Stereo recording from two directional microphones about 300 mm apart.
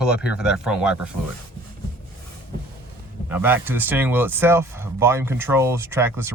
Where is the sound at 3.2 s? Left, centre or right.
Centre.